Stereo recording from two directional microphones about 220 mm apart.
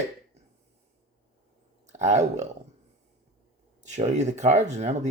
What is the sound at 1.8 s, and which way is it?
Speech, 30° right (ahead or behind).